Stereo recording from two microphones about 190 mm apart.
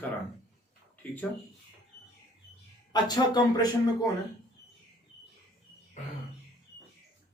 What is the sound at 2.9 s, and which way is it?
Speech, 20° left (ahead or behind).